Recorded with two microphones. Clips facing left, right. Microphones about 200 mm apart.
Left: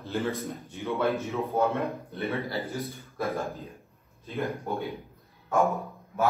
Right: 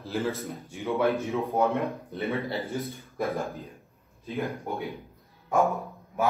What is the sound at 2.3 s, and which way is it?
Speech, centre (ahead or behind).